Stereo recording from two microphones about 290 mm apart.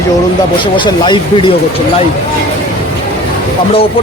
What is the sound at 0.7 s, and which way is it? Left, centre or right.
Speech, centre.